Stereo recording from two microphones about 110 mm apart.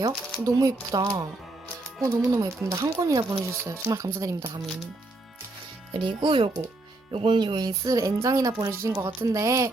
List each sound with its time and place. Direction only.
0.0 s speech: 30° right (ahead or behind)
5.9 s speech: 50° right (ahead or behind); by 9.6 s 30° right (ahead or behind)